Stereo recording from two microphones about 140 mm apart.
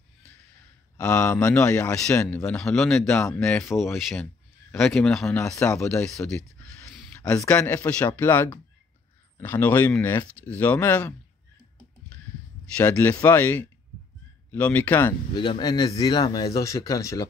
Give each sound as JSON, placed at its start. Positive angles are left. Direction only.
{"t": 0.9, "sound": "a man's voice", "side_deg": 10}
{"t": 7.4, "sound": "a man's voice", "side_deg": 10}
{"t": 12.7, "sound": "a man's voice", "side_deg": 10}
{"t": 15.3, "sound": "a man's voice", "side_deg": 35}